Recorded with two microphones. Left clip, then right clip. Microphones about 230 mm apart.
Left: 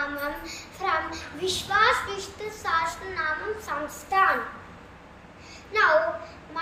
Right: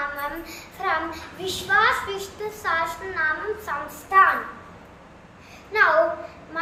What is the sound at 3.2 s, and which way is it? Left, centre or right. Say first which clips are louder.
Speech: right 5 dB; centre.